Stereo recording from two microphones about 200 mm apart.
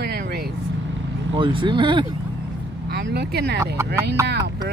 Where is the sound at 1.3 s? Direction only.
25° right (ahead or behind).